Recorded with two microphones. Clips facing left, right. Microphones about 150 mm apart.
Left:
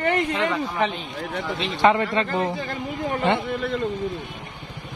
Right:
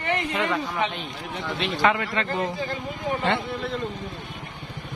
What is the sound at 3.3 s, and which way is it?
Speech, 15° left (ahead or behind).